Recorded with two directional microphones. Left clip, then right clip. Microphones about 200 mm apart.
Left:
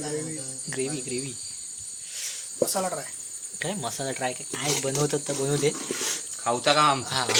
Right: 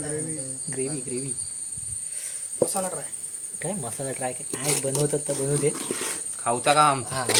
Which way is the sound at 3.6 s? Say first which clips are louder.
Left 2 dB; centre (ahead or behind).